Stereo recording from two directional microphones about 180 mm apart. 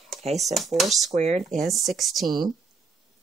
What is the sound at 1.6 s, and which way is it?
Speech, centre (ahead or behind).